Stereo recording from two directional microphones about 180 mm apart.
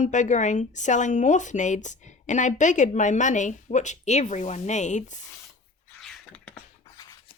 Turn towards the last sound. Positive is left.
turn(degrees=5)  # may be behind; listen again after turning